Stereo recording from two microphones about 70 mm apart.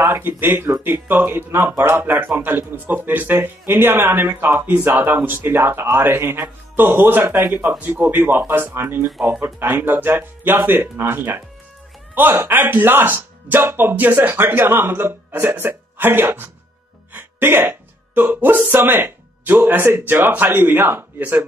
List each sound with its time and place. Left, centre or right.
0.4 s speech: right